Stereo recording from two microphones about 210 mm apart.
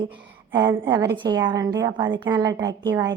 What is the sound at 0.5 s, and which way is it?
A woman's voice, 20° right (ahead or behind).